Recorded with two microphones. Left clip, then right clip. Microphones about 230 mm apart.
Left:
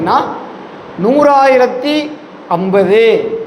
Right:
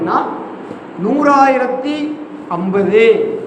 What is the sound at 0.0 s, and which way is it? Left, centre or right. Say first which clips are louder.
A man's voice: left 3 dB; left.